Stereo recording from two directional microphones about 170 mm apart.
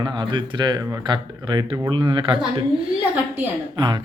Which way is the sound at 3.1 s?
10° right (ahead or behind).